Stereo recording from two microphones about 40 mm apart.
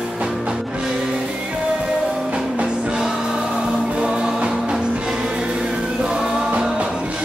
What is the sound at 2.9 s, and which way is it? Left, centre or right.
Music, centre.